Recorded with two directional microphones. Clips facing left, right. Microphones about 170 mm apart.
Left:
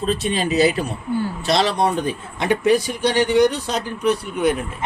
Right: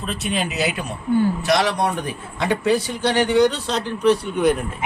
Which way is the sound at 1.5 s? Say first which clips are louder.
Left 1 dB; 25° left (ahead or behind).